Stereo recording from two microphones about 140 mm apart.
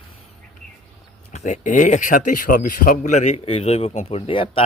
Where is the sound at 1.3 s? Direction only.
60° left (ahead or behind).